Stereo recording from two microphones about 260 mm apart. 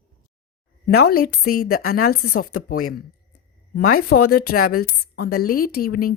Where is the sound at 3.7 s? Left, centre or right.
Left.